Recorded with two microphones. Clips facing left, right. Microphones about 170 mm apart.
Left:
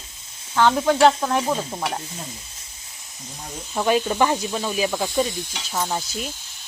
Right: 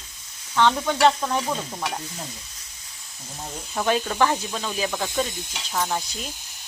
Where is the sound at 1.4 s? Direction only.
25° left (ahead or behind).